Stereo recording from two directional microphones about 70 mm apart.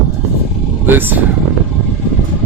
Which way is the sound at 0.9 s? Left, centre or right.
Right.